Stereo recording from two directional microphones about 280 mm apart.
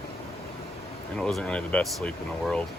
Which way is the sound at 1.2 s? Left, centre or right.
Centre.